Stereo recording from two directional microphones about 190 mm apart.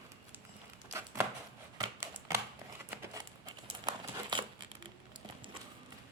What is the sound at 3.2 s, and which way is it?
Crumpling, 20° right (ahead or behind).